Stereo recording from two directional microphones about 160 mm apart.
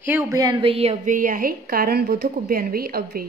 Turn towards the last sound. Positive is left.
turn(degrees=-65)  # may be behind; listen again after turning